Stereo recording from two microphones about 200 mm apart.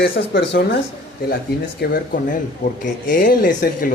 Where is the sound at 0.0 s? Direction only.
55° left (ahead or behind).